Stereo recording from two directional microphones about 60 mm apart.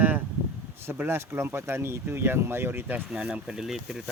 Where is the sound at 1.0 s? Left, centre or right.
Right.